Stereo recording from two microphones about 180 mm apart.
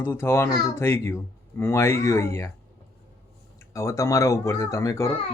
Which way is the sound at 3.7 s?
15° left (ahead or behind).